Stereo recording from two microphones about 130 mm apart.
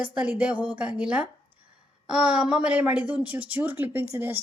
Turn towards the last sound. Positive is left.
turn(degrees=-15)  # may be behind; listen again after turning